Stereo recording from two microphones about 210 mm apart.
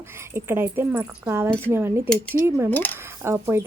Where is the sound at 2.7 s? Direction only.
10° left (ahead or behind).